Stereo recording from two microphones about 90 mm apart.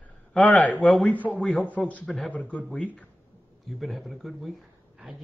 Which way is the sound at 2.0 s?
5° left (ahead or behind).